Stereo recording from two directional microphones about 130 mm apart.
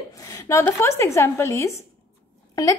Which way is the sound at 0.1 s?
25° left (ahead or behind).